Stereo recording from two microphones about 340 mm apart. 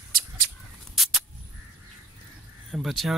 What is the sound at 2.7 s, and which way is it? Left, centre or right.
Speech, centre.